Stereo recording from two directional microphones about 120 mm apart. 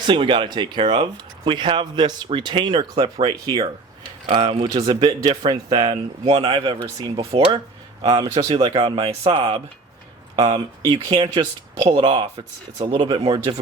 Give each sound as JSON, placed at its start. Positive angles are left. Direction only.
{"t": 0.1, "sound": "speech", "side_deg": -40}
{"t": 4.3, "sound": "speech", "side_deg": -40}
{"t": 6.7, "sound": "speech", "side_deg": -25}
{"t": 8.5, "sound": "speech", "side_deg": -50}
{"t": 10.3, "sound": "speech", "side_deg": -35}
{"t": 11.9, "sound": "speech", "side_deg": -45}